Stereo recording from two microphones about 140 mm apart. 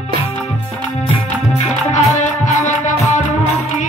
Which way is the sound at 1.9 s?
60° left (ahead or behind).